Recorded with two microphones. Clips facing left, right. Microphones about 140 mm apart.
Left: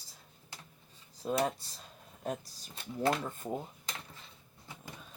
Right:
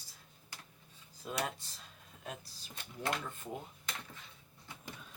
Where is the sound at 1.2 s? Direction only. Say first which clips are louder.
Left 7 dB; 35° left (ahead or behind).